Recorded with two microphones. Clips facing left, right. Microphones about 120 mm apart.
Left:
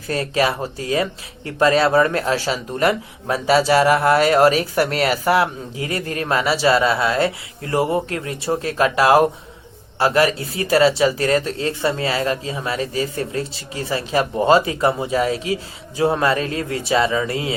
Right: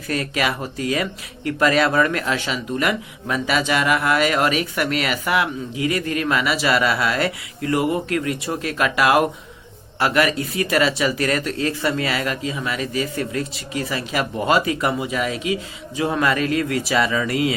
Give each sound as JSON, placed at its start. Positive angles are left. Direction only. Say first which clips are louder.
{"t": 0.1, "sound": "speech", "louder": "left 3 dB", "side_deg": 30}